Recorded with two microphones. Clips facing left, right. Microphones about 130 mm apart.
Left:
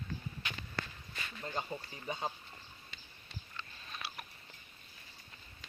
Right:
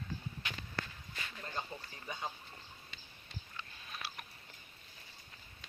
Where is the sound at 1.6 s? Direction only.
25° left (ahead or behind).